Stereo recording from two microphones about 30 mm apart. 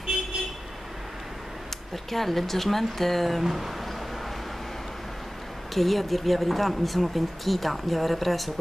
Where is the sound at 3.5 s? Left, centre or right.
Centre.